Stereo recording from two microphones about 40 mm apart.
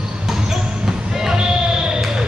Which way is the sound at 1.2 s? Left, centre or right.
Centre.